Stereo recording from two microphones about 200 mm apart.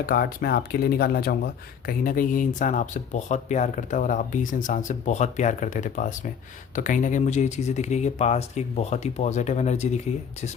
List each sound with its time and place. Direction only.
0.0 s speech: 45° left (ahead or behind)